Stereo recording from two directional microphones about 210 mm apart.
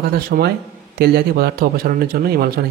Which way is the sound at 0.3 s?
45° right (ahead or behind).